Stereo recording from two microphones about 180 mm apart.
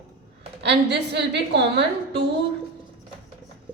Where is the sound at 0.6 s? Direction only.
70° right (ahead or behind).